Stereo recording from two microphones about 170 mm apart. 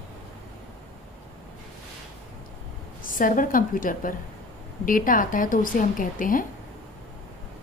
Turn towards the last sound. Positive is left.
turn(degrees=50)  # may be behind; listen again after turning